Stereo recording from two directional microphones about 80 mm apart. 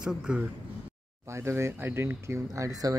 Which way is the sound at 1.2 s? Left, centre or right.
Right.